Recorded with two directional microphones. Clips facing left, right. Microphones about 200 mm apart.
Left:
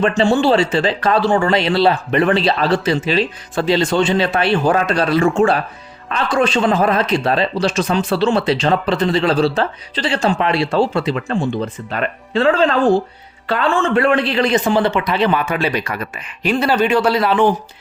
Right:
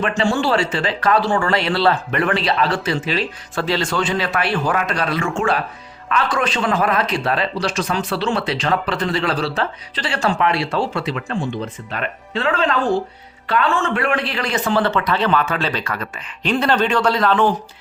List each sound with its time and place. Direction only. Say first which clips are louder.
0.0 s speech: left 5 dB; 25° left (ahead or behind)
2.2 s speech: left 3 dB; 25° left (ahead or behind)
13.9 s a man's voice: left 6 dB; 25° left (ahead or behind)